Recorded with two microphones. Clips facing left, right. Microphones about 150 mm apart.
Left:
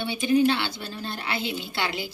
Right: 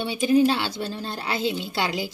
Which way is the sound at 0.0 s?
40° right (ahead or behind).